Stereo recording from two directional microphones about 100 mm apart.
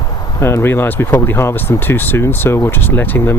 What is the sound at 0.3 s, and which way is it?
Speech, 25° left (ahead or behind).